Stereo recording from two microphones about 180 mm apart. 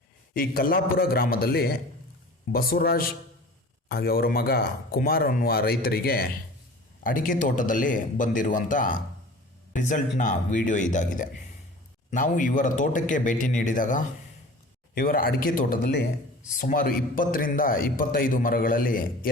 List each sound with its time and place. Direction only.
0.3 s speech: 55° left (ahead or behind)